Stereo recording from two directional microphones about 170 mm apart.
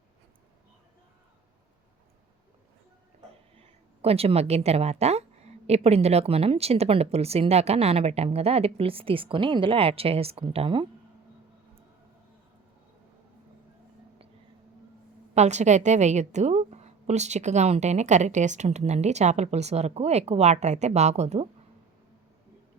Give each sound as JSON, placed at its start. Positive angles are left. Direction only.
{"t": 3.6, "sound": "a woman's voice", "side_deg": -35}
{"t": 15.4, "sound": "a woman's voice", "side_deg": -40}